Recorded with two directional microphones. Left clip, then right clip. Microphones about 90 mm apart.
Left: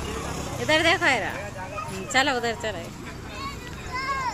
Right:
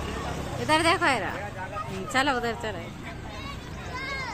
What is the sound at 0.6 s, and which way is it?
Speech, 20° right (ahead or behind).